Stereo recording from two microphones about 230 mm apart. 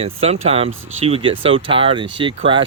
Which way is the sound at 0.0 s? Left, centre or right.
Right.